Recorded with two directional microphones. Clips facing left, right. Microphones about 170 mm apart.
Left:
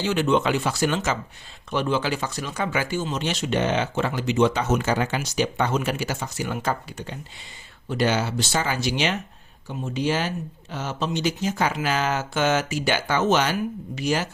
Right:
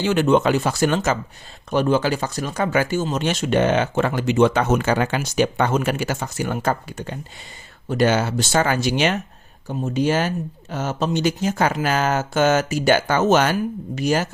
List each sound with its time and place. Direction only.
0.0 s speech: 50° right (ahead or behind)